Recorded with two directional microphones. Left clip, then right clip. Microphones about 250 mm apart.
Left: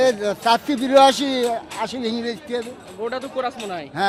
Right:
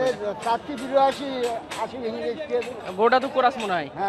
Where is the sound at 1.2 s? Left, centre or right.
Left.